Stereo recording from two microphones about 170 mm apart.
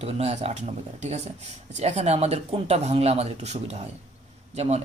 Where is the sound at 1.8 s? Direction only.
40° right (ahead or behind).